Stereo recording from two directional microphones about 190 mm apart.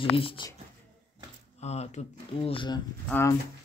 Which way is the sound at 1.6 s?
35° left (ahead or behind).